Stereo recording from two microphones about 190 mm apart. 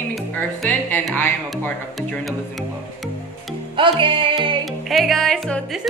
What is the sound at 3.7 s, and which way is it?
Music, 25° right (ahead or behind).